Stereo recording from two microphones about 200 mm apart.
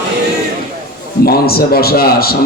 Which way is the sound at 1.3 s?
50° left (ahead or behind).